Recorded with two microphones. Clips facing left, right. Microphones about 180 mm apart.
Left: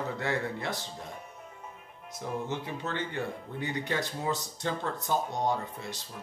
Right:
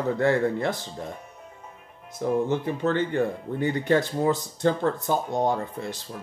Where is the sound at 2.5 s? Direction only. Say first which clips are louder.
Right 10 dB; 50° right (ahead or behind).